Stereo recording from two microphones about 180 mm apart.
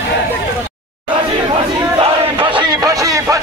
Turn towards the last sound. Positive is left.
turn(degrees=-20)  # may be behind; listen again after turning